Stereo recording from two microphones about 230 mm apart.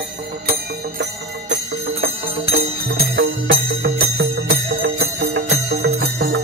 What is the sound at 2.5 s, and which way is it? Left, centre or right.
Music, right.